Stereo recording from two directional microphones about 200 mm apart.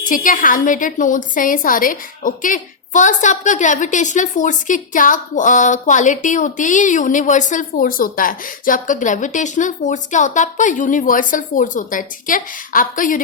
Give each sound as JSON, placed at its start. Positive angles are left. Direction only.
{"t": 0.0, "sound": "a woman's voice", "side_deg": 40}